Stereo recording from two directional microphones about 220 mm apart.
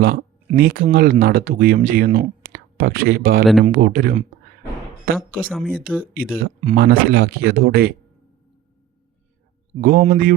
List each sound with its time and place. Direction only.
0.0 s speech: 45° right (ahead or behind)
5.5 s speech: centre (ahead or behind)
6.1 s speech: 40° right (ahead or behind)
9.8 s speech: 40° right (ahead or behind)